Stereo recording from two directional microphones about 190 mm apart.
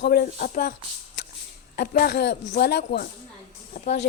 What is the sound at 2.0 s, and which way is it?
Speech, 65° left (ahead or behind).